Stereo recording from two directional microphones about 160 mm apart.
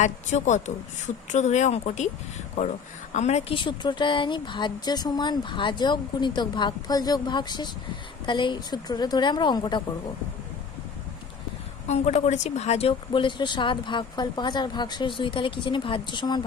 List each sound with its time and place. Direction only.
0.0 s speech: 50° left (ahead or behind)
3.1 s speech: 45° left (ahead or behind)
3.6 s speech: 30° left (ahead or behind)
11.9 s speech: 45° left (ahead or behind); by 16.4 s 30° left (ahead or behind)